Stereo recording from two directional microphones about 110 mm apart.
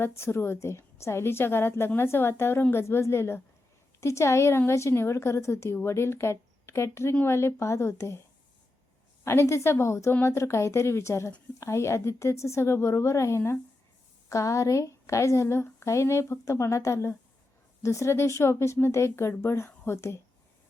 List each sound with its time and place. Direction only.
0.2 s a woman's voice: 25° left (ahead or behind)
9.2 s a woman's voice: 25° left (ahead or behind)